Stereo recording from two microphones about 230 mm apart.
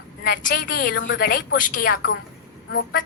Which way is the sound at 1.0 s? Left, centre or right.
Left.